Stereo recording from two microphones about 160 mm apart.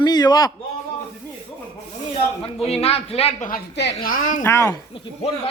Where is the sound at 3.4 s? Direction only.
75° left (ahead or behind).